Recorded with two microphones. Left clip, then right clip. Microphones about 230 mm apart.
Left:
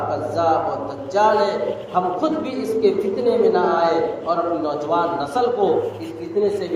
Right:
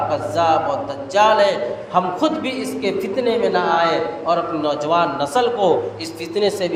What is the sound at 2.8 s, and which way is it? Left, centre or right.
A man's voice, right.